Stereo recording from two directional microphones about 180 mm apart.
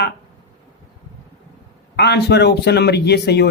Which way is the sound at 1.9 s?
65° left (ahead or behind).